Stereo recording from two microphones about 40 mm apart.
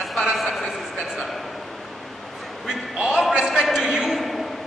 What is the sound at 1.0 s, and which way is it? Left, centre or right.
Speech, centre.